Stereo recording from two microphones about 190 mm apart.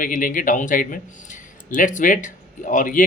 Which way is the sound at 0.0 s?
45° left (ahead or behind).